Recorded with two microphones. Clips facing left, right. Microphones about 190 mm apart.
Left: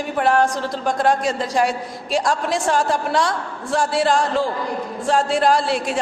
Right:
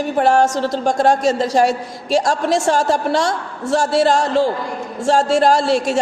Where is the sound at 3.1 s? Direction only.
25° right (ahead or behind).